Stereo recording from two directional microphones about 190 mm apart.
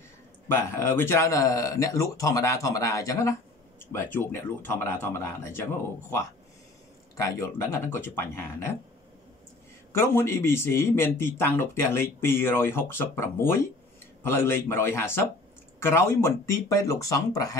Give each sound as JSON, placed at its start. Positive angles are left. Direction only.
{"t": 0.5, "sound": "a man's voice", "side_deg": 10}
{"t": 9.9, "sound": "a man's voice", "side_deg": 10}